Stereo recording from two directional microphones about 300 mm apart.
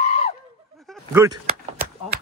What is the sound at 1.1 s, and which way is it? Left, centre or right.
Speech, centre.